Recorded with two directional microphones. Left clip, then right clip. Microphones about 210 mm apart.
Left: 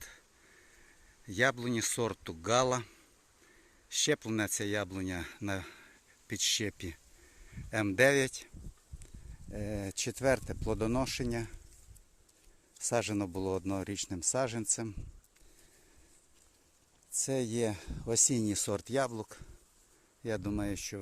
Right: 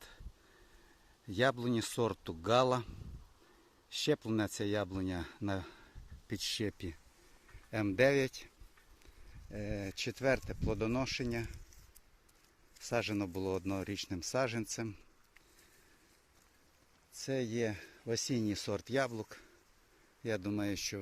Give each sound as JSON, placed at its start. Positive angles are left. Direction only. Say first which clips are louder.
{"t": 1.3, "sound": "speech", "louder": "left 2 dB", "side_deg": -5}
{"t": 12.8, "sound": "speech", "louder": "left 3 dB", "side_deg": 15}
{"t": 17.2, "sound": "speech", "louder": "left 3 dB", "side_deg": 15}